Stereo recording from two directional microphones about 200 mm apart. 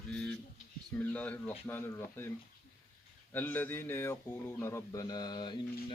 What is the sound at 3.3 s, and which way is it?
A man's voice, 10° left (ahead or behind).